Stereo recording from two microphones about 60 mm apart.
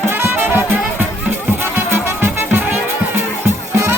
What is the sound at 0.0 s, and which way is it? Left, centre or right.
Music, right.